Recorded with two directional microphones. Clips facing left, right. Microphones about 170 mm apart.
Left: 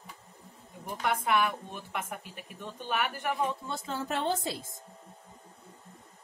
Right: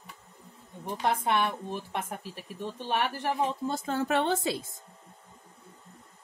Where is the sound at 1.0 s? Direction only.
30° right (ahead or behind).